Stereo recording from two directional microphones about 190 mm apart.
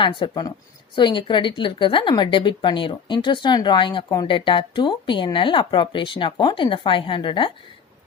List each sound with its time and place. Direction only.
0.0 s a woman's voice: 25° left (ahead or behind)